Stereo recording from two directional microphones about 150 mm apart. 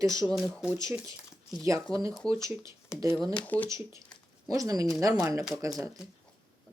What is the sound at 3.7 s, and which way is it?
Speech, 20° right (ahead or behind).